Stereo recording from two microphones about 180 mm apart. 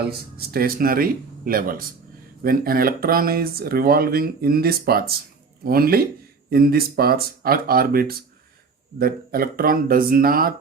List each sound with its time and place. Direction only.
0.3 s speech: 55° right (ahead or behind)